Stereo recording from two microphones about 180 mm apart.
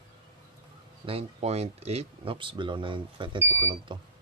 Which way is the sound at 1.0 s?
35° right (ahead or behind).